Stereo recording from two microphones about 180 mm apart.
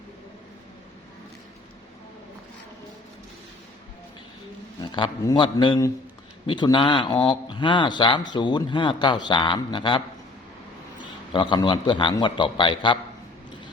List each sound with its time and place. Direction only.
4.8 s a man's voice: 25° left (ahead or behind)